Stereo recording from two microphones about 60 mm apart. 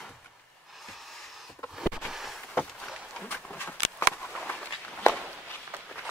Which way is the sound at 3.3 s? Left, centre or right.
Left.